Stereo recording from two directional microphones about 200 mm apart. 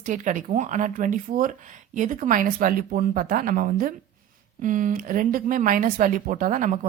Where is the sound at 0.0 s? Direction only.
40° right (ahead or behind).